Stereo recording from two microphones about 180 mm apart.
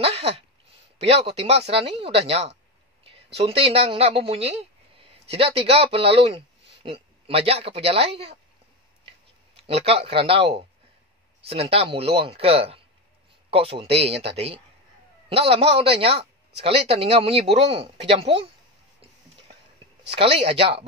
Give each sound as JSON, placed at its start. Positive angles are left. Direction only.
{"t": 0.0, "sound": "a sound", "side_deg": -35}
{"t": 0.9, "sound": "speech", "side_deg": -35}
{"t": 9.8, "sound": "speech", "side_deg": -30}
{"t": 20.1, "sound": "speech", "side_deg": -30}